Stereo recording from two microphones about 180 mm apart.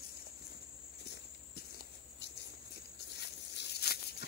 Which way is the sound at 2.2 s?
70° left (ahead or behind).